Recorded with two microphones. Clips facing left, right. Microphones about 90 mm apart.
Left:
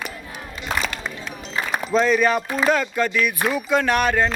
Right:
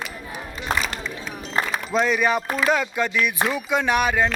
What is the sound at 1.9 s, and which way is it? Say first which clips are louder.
Speech: left 3 dB; 15° right (ahead or behind).